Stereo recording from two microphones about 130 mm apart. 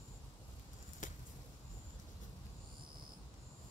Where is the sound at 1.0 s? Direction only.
80° left.